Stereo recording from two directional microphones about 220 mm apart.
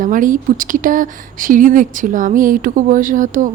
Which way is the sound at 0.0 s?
35° right (ahead or behind).